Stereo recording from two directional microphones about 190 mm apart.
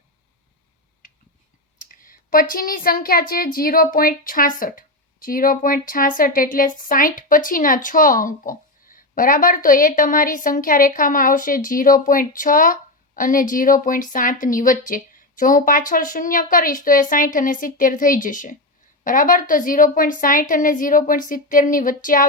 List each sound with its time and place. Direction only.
1.8 s speech: 45° left (ahead or behind)